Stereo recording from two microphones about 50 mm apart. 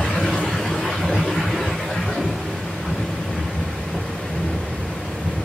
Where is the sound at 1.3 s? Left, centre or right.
Centre.